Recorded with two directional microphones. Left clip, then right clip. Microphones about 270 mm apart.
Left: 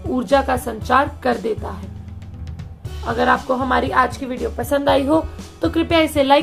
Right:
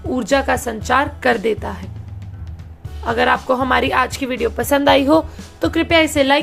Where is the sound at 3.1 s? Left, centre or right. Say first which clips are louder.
Right 2 dB; right.